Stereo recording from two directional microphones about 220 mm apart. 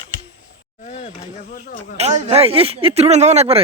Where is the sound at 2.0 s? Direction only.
25° right (ahead or behind).